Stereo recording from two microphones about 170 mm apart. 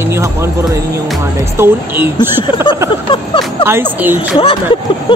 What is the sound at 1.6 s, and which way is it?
Speech, 15° right (ahead or behind).